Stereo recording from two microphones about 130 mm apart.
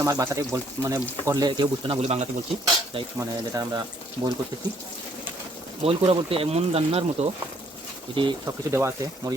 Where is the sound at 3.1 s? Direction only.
25° right (ahead or behind).